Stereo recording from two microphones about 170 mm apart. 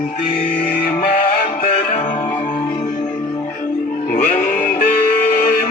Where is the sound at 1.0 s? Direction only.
60° left (ahead or behind).